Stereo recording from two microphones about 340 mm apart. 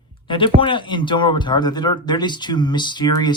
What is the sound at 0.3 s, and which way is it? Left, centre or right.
Speech, centre.